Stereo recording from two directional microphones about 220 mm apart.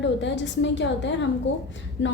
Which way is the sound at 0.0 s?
55° left (ahead or behind).